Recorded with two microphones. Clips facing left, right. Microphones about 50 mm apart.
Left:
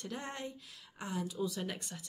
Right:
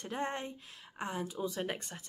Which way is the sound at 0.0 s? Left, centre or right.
Right.